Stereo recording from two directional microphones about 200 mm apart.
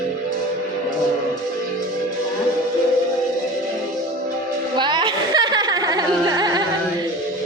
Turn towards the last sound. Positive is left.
turn(degrees=-20)  # may be behind; listen again after turning